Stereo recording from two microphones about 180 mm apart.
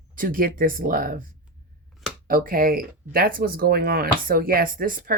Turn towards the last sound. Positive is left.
turn(degrees=-50)  # may be behind; listen again after turning